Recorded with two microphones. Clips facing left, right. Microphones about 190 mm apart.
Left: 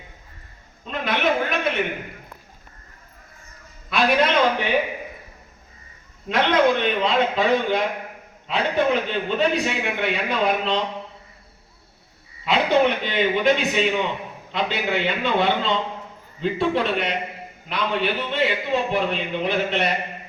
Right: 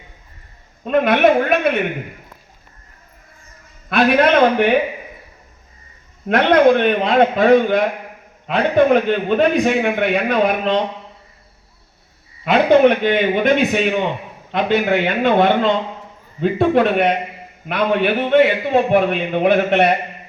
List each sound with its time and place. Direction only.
0.9 s a man's voice: 55° right (ahead or behind)
3.8 s a man's voice: 55° right (ahead or behind)
6.2 s a man's voice: 55° right (ahead or behind)
12.5 s a man's voice: 55° right (ahead or behind)